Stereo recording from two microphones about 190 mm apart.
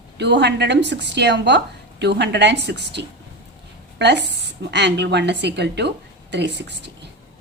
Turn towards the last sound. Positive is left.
turn(degrees=-65)  # may be behind; listen again after turning